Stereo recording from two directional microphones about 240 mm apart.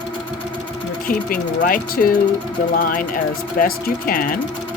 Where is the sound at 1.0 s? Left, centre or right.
Left.